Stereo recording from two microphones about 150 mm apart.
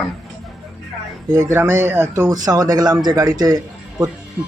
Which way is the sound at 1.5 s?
20° right (ahead or behind).